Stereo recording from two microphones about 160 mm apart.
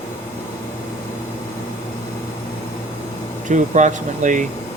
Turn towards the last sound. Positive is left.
turn(degrees=-50)  # may be behind; listen again after turning